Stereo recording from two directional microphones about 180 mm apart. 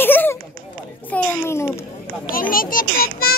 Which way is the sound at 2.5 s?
50° left (ahead or behind).